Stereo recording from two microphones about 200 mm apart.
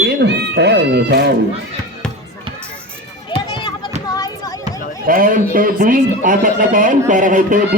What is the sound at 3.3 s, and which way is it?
Run, 25° left (ahead or behind).